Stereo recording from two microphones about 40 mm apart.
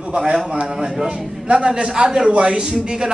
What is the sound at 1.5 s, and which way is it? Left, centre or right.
A man's voice, right.